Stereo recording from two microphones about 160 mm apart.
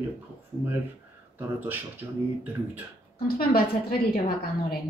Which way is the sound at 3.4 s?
70° left (ahead or behind).